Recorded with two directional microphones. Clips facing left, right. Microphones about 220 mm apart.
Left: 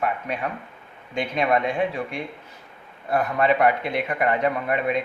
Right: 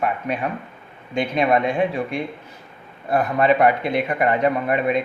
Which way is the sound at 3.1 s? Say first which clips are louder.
Right 3 dB; 30° right (ahead or behind).